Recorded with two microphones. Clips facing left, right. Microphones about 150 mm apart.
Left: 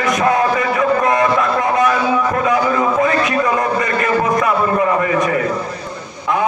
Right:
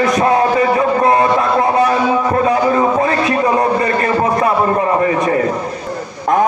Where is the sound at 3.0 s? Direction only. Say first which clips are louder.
Right 1 dB; 35° right (ahead or behind).